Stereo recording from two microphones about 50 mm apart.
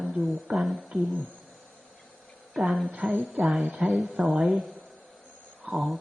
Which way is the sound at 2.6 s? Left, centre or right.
Centre.